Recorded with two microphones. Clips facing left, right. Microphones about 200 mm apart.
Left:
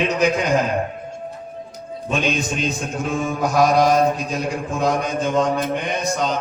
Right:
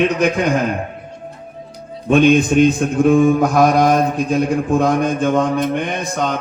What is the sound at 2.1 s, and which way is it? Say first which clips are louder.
Mantra: right 11 dB; 55° right (ahead or behind).